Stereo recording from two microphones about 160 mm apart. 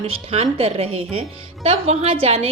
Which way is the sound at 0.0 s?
40° right (ahead or behind).